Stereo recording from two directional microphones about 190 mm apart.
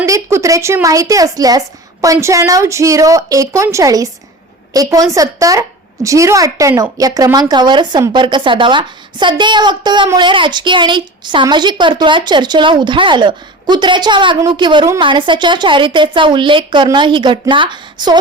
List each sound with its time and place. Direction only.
0.0 s a woman's voice: 15° right (ahead or behind)